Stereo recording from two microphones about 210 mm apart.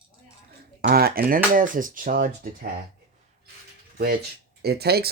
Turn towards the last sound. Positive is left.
turn(degrees=-50)  # may be behind; listen again after turning